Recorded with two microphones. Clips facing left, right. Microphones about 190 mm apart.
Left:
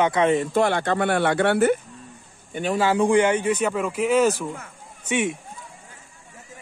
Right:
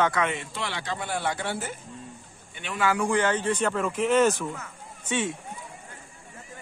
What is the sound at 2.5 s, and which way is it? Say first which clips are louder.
Speech: left 6 dB; 40° left (ahead or behind).